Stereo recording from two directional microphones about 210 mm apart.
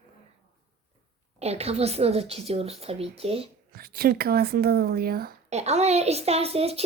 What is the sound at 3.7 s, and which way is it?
Speech, 45° right (ahead or behind).